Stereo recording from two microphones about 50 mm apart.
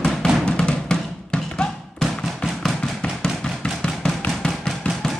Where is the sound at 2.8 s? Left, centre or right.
Centre.